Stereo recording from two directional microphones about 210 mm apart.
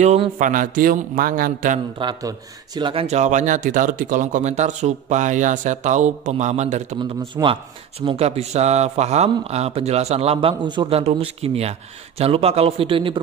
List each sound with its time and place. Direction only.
0.0 s a man's voice: 35° right (ahead or behind)
2.0 s a man's voice: 20° right (ahead or behind)
7.0 s speech: 20° right (ahead or behind)